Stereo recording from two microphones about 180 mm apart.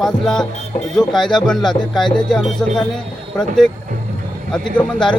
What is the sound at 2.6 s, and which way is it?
Speech, 5° left (ahead or behind).